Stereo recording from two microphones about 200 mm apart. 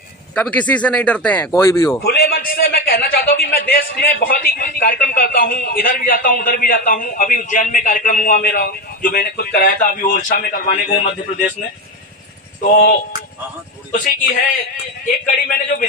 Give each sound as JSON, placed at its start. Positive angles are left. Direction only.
{"t": 0.3, "sound": "speech", "side_deg": 5}
{"t": 2.0, "sound": "a man's voice", "side_deg": 50}
{"t": 12.7, "sound": "a man's voice", "side_deg": 50}